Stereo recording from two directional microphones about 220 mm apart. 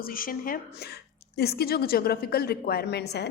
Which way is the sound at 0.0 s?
40° left (ahead or behind).